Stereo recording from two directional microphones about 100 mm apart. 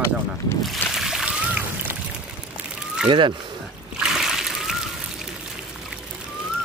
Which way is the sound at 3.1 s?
55° right (ahead or behind).